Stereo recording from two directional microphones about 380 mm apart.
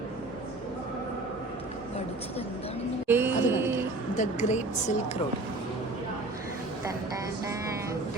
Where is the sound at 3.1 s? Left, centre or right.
Centre.